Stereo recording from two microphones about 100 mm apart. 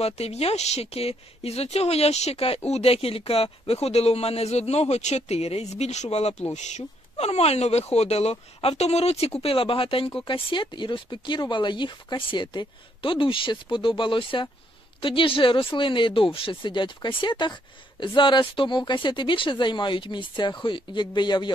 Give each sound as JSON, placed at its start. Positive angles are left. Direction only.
{"t": 0.0, "sound": "speech", "side_deg": 90}
{"t": 9.4, "sound": "speech", "side_deg": 65}